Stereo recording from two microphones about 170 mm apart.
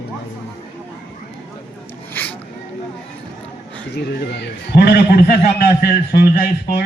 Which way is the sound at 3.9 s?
75° left (ahead or behind).